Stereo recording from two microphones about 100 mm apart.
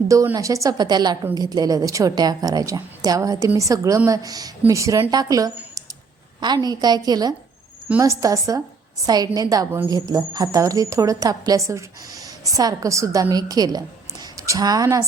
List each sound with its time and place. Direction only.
0.3 s a woman's voice: 35° right (ahead or behind)